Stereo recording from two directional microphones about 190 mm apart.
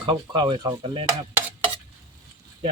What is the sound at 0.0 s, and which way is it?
Speech, 25° right (ahead or behind).